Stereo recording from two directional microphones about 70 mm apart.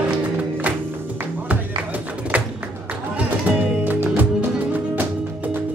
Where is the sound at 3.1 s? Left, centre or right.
Right.